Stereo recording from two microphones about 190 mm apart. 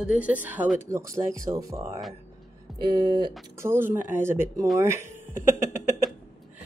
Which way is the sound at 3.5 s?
10° right (ahead or behind).